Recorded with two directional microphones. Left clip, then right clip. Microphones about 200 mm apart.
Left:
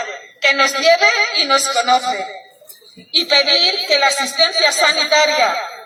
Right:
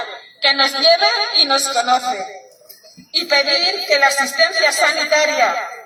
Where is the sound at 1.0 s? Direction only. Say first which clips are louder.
Left 1 dB; 25° left (ahead or behind); by 2.2 s 10° left (ahead or behind).